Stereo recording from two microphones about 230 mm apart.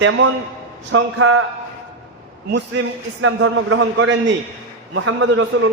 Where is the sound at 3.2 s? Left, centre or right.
Right.